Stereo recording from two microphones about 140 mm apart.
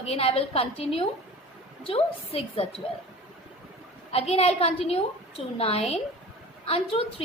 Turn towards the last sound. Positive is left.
turn(degrees=40)  # may be behind; listen again after turning